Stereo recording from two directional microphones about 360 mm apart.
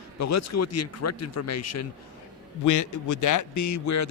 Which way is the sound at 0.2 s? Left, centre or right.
Left.